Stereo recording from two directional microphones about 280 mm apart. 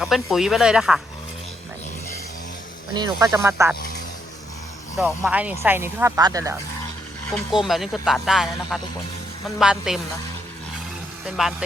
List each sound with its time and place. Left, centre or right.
0.0 s speech: centre
2.9 s speech: centre
4.9 s speech: centre
7.3 s speech: centre
11.3 s speech: centre